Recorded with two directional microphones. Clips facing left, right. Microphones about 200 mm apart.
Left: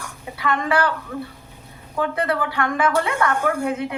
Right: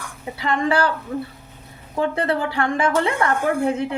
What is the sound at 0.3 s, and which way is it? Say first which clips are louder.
Speech: right 1 dB; 30° right (ahead or behind).